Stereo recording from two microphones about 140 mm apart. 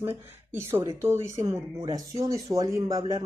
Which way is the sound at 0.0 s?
15° right (ahead or behind).